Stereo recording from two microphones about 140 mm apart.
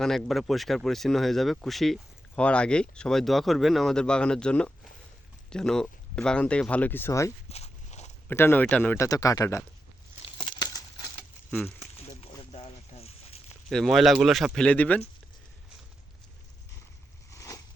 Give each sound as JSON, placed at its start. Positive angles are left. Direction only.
{"t": 0.0, "sound": "speech", "side_deg": 5}
{"t": 7.5, "sound": "walk", "side_deg": 50}
{"t": 8.3, "sound": "speech", "side_deg": 15}
{"t": 9.0, "sound": "speech", "side_deg": 25}
{"t": 10.2, "sound": "crumpling", "side_deg": 30}
{"t": 12.4, "sound": "a sound", "side_deg": 45}
{"t": 13.7, "sound": "speech", "side_deg": 0}
{"t": 17.3, "sound": "a sound", "side_deg": 20}